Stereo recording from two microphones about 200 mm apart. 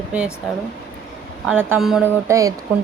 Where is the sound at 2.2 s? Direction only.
15° right (ahead or behind).